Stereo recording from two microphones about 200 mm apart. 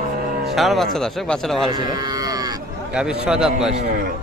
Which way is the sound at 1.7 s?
20° right (ahead or behind).